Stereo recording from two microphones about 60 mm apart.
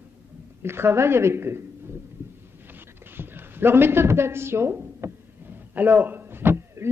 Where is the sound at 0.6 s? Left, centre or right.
Right.